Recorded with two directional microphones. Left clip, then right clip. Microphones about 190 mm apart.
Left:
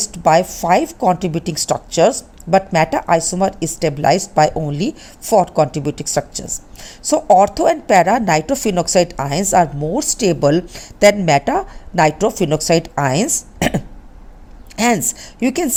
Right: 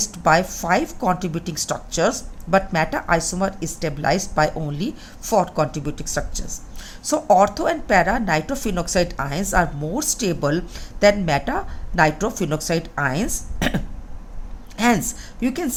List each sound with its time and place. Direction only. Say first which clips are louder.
0.1 s a sound: left 5 dB; 35° left (ahead or behind)
0.4 s a woman's voice: left 6 dB; 25° left (ahead or behind)
7.6 s a woman's voice: left 6 dB; 40° left (ahead or behind)